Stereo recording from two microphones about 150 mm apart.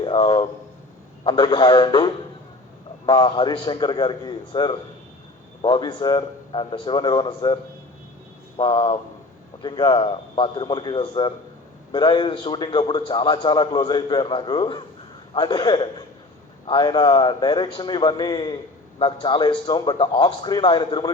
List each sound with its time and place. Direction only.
0.0 s a man's voice: 35° left (ahead or behind)
3.1 s a man's voice: 30° left (ahead or behind)